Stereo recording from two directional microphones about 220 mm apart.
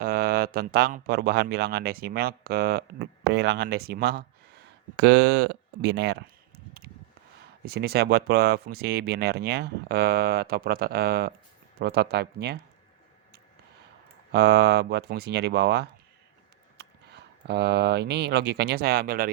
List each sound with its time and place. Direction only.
0.0 s speech: 45° right (ahead or behind)
7.6 s speech: 45° right (ahead or behind)
14.3 s speech: 50° right (ahead or behind)